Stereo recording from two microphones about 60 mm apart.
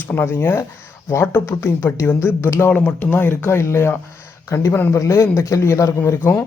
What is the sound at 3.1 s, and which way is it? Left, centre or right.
Speech, left.